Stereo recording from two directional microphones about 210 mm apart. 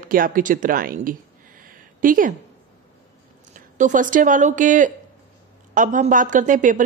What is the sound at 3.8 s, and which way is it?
A woman's voice, 40° right (ahead or behind).